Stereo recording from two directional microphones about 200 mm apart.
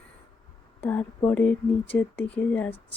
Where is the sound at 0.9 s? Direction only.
10° left (ahead or behind).